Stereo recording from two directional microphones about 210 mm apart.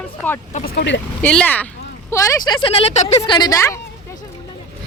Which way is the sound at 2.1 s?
20° left (ahead or behind).